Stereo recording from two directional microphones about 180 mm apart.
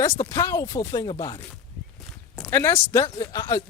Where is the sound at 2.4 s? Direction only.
15° left (ahead or behind).